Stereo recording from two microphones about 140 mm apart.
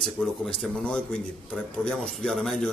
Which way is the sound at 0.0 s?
5° left (ahead or behind).